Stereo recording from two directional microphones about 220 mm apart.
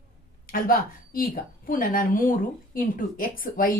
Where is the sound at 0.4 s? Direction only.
40° left (ahead or behind).